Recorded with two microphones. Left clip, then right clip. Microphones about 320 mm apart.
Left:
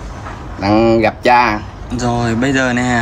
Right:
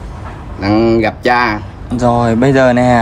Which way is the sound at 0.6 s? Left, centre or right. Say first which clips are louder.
Even; centre.